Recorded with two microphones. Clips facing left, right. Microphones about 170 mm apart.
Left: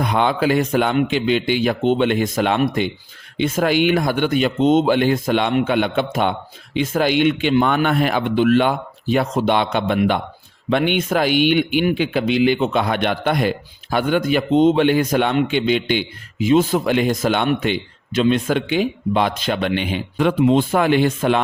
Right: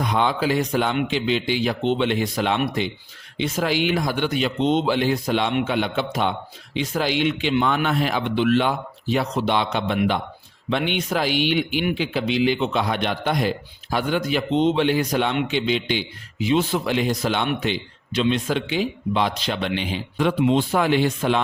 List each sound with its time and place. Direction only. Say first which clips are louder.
0.0 s a man's voice: left 3 dB; 60° left (ahead or behind)